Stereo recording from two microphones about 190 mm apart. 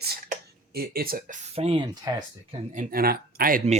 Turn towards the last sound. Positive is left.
turn(degrees=-50)  # may be behind; listen again after turning